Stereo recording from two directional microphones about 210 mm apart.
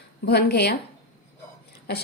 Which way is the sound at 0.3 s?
50° left (ahead or behind).